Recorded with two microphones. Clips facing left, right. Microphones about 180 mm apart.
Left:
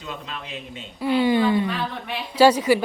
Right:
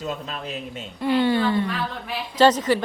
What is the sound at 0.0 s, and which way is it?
Speech, 40° right (ahead or behind).